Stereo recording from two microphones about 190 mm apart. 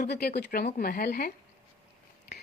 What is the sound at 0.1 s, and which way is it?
Speech, 60° left (ahead or behind).